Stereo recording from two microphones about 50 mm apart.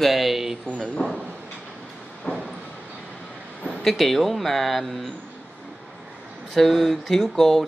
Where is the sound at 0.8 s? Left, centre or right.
Centre.